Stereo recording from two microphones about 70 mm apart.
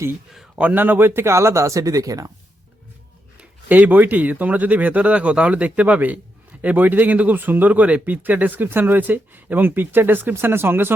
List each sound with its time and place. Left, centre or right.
0.5 s speech: right
3.7 s speech: right